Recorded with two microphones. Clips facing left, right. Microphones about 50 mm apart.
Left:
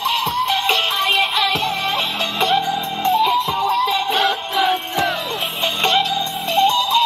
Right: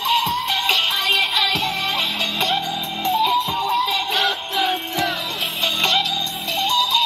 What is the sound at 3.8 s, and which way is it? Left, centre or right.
Music, left.